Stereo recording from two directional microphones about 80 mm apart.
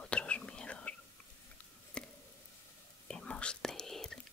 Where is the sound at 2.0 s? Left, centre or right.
Centre.